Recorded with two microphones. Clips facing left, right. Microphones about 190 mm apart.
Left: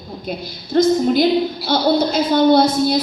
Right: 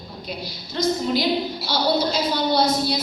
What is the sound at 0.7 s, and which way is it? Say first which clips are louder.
A woman's voice: left 8 dB; 50° left (ahead or behind).